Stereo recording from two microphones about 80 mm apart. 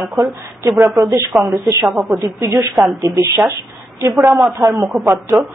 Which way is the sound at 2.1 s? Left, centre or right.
Right.